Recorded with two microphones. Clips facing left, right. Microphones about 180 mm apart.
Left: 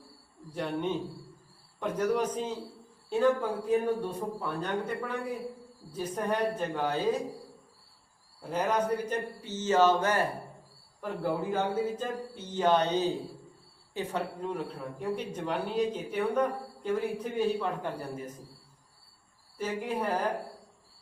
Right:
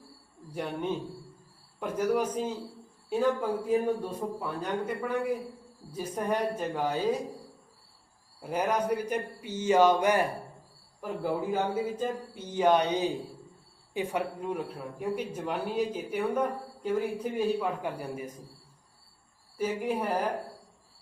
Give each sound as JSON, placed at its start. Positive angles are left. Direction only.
{"t": 0.5, "sound": "speech", "side_deg": -10}
{"t": 8.4, "sound": "speech", "side_deg": -10}
{"t": 19.5, "sound": "speech", "side_deg": -10}